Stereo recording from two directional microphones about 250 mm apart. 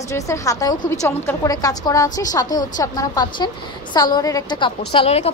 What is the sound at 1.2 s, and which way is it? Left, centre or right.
A woman's voice, centre.